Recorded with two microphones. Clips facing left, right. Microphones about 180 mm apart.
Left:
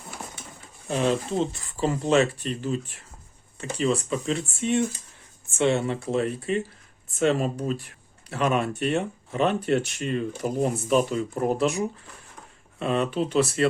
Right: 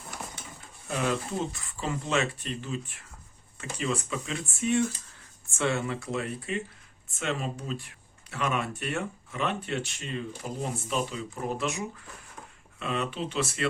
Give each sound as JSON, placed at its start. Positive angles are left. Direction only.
{"t": 0.9, "sound": "speech", "side_deg": 30}
{"t": 8.3, "sound": "speech", "side_deg": 35}
{"t": 11.5, "sound": "speech", "side_deg": 35}
{"t": 12.8, "sound": "speech", "side_deg": 35}